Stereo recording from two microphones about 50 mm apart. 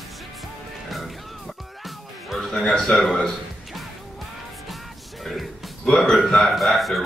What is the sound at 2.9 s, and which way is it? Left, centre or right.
Speech, centre.